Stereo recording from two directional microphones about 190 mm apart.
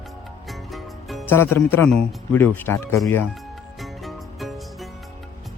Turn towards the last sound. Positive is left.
turn(degrees=0)  # may be behind; listen again after turning